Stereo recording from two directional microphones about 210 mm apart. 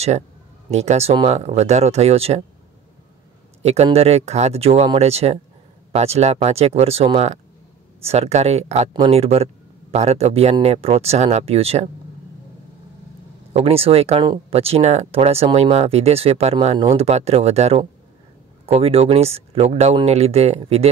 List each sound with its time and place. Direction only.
0.7 s speech: 30° right (ahead or behind)
3.6 s speech: 30° right (ahead or behind)
13.5 s speech: 30° right (ahead or behind)